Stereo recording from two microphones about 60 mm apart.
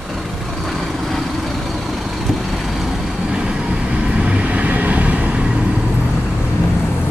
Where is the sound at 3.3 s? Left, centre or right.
Centre.